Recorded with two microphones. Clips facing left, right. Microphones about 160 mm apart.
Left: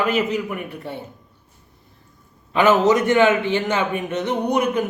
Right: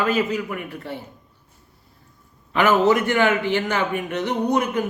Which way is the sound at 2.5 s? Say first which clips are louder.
Left 2 dB; 20° left (ahead or behind).